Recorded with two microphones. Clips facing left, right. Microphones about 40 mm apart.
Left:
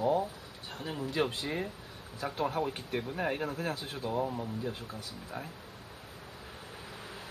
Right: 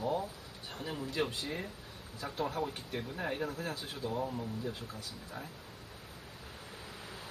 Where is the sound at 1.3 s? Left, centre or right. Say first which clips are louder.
Left 4 dB; left.